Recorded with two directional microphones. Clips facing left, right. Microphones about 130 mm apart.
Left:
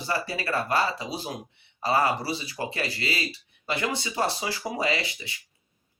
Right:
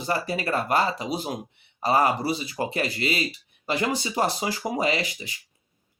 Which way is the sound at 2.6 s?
25° right (ahead or behind).